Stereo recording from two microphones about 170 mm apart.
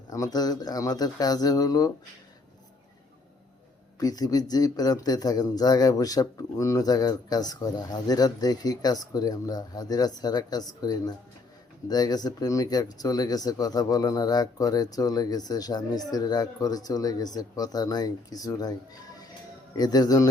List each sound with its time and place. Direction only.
0.1 s speech: 20° left (ahead or behind)
4.0 s speech: 20° left (ahead or behind)
19.7 s speech: 25° left (ahead or behind)